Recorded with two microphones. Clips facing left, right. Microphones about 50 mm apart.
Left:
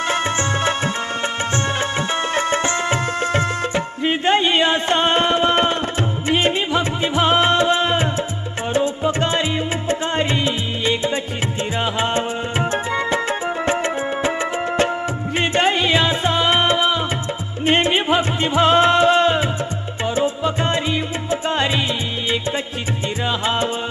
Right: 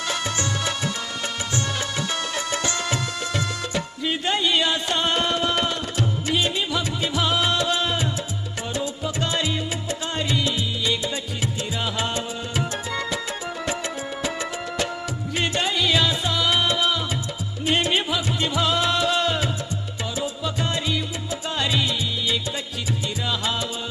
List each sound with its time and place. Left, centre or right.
0.1 s music: left
15.4 s music: left